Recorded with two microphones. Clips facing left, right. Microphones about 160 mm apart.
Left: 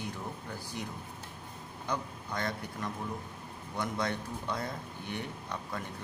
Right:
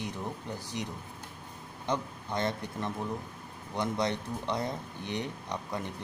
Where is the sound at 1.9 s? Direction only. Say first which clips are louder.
Right 4 dB; 20° right (ahead or behind).